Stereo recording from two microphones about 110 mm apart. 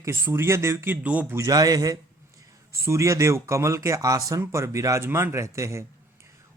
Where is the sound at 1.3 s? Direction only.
30° right (ahead or behind).